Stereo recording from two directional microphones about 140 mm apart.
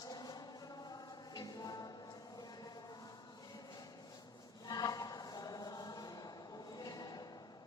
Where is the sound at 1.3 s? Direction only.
25° left (ahead or behind).